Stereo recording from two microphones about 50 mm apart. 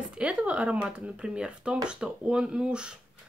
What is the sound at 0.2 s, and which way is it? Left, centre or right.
Speech, centre.